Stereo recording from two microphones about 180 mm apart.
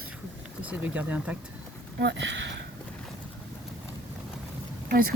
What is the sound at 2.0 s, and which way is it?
Speech, 85° right.